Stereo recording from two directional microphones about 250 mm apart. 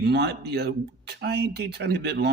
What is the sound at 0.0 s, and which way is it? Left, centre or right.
Speech, right.